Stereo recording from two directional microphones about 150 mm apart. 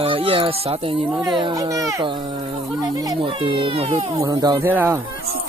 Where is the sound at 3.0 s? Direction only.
35° right (ahead or behind).